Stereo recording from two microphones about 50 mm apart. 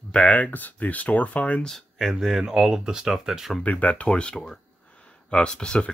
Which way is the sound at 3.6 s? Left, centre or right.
Left.